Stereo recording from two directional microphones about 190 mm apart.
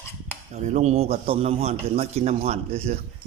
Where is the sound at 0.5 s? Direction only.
35° right (ahead or behind).